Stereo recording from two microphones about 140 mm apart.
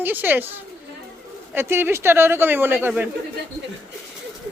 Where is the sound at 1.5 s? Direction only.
15° right (ahead or behind).